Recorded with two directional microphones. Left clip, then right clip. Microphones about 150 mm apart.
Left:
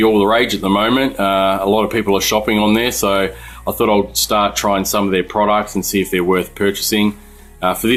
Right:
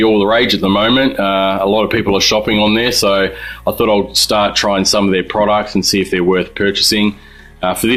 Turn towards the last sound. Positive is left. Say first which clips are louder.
# right 1 dB
turn(degrees=-35)  # may be behind; listen again after turning